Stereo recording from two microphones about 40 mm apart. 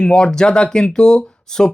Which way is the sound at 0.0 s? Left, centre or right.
Centre.